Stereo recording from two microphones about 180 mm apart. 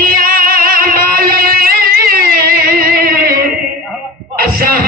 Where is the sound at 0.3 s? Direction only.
55° right (ahead or behind).